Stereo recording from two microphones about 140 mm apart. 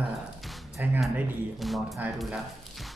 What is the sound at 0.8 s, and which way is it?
Speech, 10° right (ahead or behind).